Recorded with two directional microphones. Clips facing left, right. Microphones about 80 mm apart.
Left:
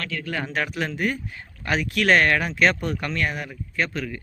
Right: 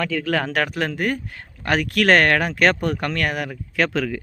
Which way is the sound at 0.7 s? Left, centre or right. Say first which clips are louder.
Right 3 dB; right.